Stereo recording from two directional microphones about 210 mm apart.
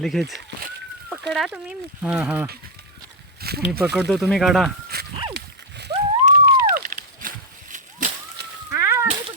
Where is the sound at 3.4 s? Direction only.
50° right (ahead or behind).